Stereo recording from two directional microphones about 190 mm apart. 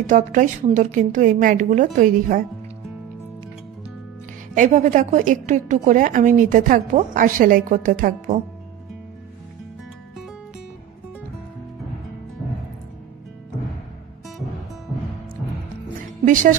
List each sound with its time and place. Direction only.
0.0 s a woman's voice: 40° right (ahead or behind)
4.6 s a woman's voice: 40° right (ahead or behind)